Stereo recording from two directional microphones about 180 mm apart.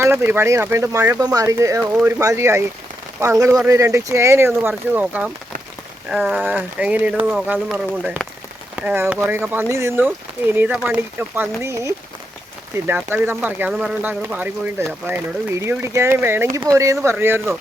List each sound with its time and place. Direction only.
0.0 s speech: 15° right (ahead or behind)